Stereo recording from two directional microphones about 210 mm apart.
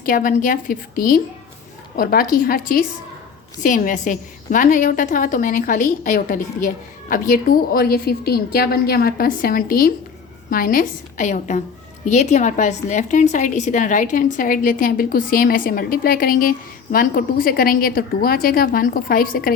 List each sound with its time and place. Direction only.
0.0 s a woman's voice: 40° left (ahead or behind)